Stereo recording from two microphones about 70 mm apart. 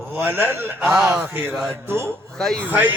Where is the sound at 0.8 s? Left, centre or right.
Centre.